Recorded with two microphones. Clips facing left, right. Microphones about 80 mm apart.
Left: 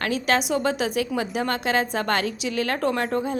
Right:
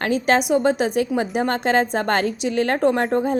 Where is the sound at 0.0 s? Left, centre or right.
Right.